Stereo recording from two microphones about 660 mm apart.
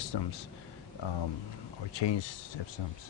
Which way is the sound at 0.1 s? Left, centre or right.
Left.